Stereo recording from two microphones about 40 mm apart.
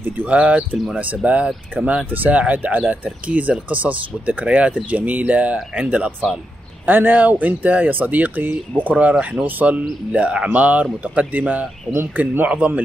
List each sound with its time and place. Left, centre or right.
0.3 s speech: right
6.9 s speech: right
10.1 s speech: right
10.5 s speech: right